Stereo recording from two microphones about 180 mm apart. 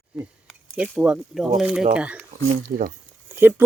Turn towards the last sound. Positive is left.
turn(degrees=-10)  # may be behind; listen again after turning